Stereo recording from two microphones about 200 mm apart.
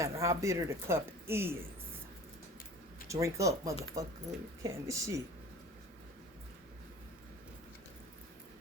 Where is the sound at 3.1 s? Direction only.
15° right (ahead or behind).